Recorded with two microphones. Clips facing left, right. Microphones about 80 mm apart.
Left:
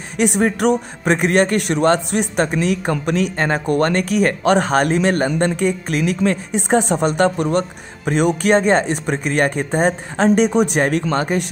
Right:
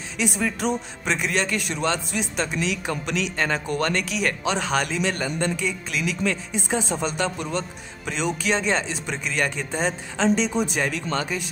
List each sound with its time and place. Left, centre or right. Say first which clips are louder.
0.2 s speech: left 9 dB; left